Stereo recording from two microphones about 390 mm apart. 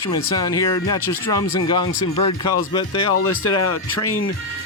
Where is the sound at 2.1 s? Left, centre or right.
Left.